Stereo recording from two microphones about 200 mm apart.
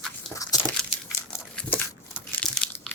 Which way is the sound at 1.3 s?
10° left (ahead or behind).